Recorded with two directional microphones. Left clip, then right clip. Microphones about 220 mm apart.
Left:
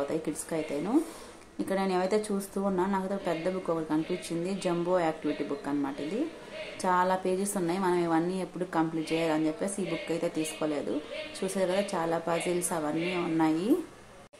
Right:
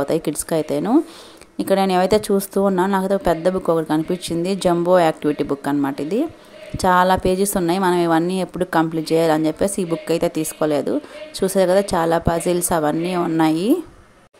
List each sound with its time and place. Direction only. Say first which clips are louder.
0.0 s speech: right 11 dB; 40° right (ahead or behind)